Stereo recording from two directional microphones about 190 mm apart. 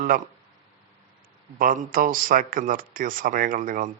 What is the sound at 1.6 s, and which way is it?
Speech, 45° right (ahead or behind).